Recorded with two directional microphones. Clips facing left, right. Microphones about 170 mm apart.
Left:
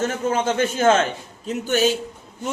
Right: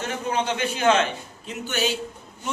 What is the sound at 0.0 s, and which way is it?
A man's voice, 45° left (ahead or behind).